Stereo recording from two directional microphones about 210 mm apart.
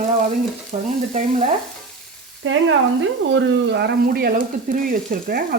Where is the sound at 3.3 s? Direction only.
60° right (ahead or behind).